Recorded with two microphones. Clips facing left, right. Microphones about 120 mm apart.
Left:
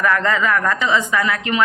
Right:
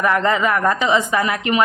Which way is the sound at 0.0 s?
20° right (ahead or behind).